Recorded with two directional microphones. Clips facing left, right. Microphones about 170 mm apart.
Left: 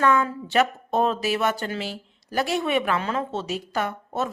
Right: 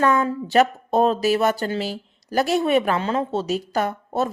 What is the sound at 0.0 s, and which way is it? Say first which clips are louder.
Speech: right 2 dB; 35° right (ahead or behind).